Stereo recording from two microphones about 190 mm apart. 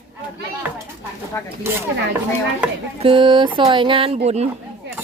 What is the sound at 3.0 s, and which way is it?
Speech, 25° right (ahead or behind).